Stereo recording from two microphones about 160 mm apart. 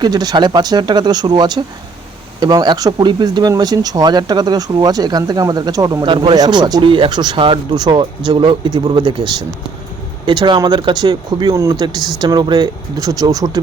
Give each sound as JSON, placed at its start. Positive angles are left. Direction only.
{"t": 0.0, "sound": "speech", "side_deg": -25}